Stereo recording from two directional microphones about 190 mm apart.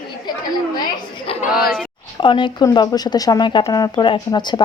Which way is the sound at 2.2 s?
25° left (ahead or behind).